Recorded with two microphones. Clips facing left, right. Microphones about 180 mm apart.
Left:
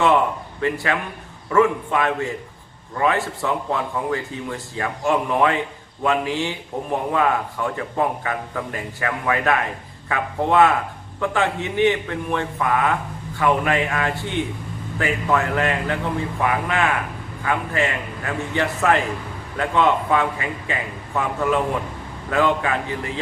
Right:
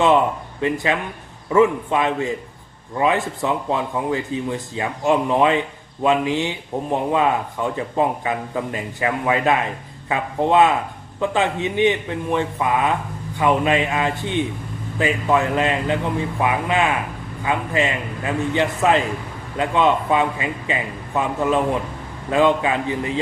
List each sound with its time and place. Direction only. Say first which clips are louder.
0.6 s a man's voice: right 2 dB; 20° right (ahead or behind)